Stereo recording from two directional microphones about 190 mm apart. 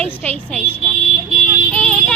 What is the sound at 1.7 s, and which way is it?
Vehicle, 5° left (ahead or behind).